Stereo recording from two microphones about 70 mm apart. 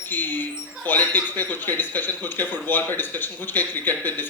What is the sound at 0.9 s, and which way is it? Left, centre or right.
Speech, left.